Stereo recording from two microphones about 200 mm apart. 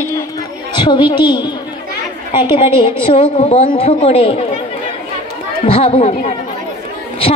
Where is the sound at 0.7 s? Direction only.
25° left (ahead or behind).